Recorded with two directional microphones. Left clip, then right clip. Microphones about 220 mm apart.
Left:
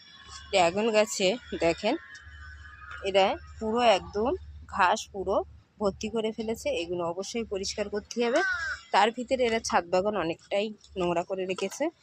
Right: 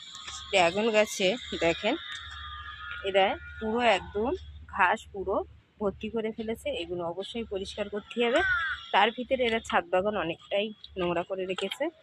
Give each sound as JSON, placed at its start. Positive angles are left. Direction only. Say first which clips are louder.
{"t": 0.5, "sound": "speech", "louder": "even", "side_deg": -5}
{"t": 3.0, "sound": "speech", "louder": "left 1 dB", "side_deg": 5}